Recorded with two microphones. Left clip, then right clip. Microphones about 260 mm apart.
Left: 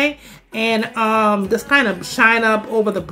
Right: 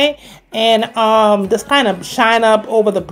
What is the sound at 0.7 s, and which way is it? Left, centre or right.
Speech, centre.